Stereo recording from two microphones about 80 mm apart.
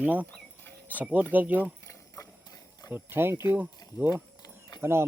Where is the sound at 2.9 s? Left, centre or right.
Right.